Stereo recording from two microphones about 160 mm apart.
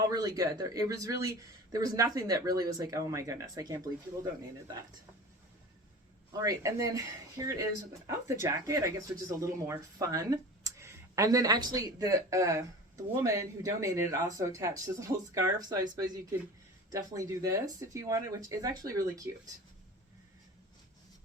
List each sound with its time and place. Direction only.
0.1 s speech: 25° right (ahead or behind)
6.3 s speech: 20° right (ahead or behind)